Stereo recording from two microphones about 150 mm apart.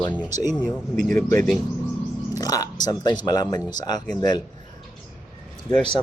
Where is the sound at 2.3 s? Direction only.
25° left (ahead or behind).